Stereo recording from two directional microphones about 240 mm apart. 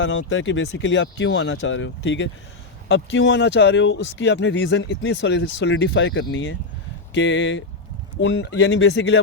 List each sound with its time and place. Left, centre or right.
0.0 s speech: left